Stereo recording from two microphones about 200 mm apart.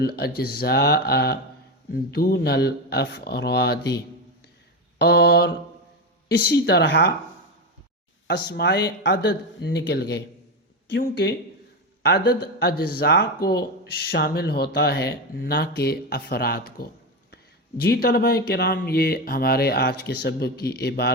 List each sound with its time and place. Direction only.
0.0 s speech: 50° left (ahead or behind)
8.3 s speech: 55° left (ahead or behind)
17.8 s speech: 50° left (ahead or behind)